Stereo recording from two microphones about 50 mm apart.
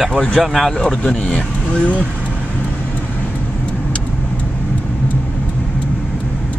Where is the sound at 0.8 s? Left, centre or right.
Centre.